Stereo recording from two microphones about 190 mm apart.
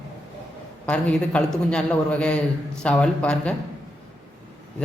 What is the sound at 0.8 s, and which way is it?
A man's voice, 5° left (ahead or behind).